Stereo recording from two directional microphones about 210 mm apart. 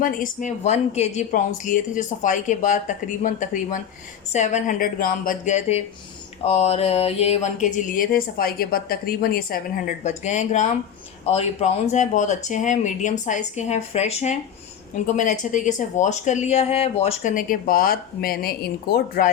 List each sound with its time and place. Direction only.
0.0 s speech: 40° left (ahead or behind)